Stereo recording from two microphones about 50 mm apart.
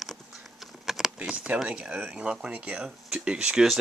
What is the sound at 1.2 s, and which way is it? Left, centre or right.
Speech, right.